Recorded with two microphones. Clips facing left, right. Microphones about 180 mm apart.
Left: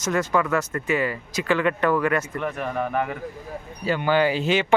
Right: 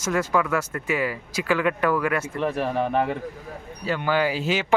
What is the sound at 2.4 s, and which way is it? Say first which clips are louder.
Speech: right 3 dB; 30° right (ahead or behind).